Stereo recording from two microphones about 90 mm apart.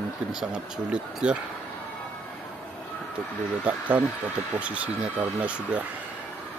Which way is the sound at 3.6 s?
20° right (ahead or behind).